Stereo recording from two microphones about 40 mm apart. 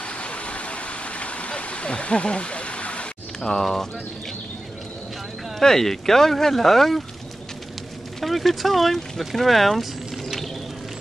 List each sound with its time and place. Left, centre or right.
0.0 s vehicle: left
3.3 s speech: centre
5.6 s speech: centre
8.2 s speech: centre